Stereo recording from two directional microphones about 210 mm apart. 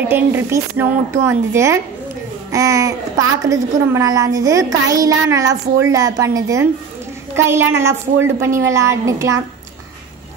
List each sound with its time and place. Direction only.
0.1 s a child's voice: 10° right (ahead or behind)